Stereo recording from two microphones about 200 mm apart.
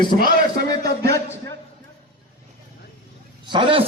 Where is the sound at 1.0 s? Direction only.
15° left (ahead or behind).